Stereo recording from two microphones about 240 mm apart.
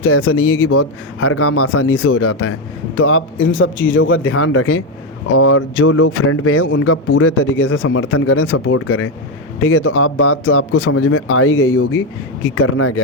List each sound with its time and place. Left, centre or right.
0.0 s speech: left